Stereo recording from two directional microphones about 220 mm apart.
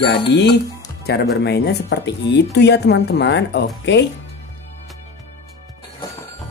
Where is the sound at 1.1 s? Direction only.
50° left (ahead or behind).